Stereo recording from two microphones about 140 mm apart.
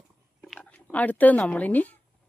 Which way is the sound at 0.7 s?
10° left (ahead or behind).